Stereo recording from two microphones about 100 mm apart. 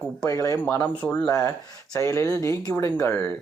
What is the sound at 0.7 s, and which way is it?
Speech, 45° left (ahead or behind).